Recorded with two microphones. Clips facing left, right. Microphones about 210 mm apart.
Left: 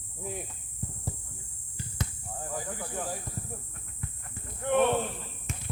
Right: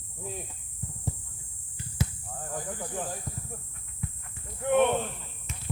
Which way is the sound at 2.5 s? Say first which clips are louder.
Right 1 dB; 10° left (ahead or behind).